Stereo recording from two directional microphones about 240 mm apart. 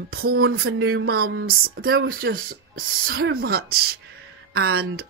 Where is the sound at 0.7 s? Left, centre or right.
Right.